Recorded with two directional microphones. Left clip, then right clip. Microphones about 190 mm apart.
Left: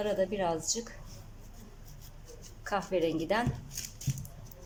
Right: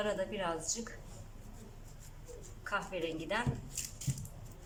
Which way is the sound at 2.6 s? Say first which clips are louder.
Left 7 dB; 35° left (ahead or behind).